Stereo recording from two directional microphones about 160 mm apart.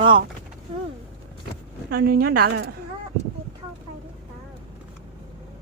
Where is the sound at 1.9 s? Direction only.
70° right (ahead or behind).